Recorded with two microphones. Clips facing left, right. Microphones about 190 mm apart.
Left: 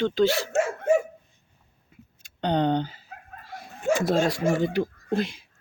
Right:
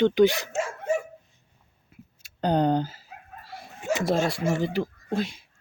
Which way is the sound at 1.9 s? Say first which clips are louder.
Right 2 dB; 5° right (ahead or behind).